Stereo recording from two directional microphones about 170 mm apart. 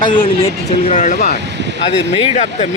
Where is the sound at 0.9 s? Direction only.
45° left (ahead or behind).